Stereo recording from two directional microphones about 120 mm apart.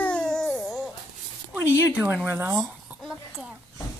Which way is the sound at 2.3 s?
20° right (ahead or behind).